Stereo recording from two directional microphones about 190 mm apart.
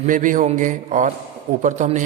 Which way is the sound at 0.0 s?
45° right (ahead or behind).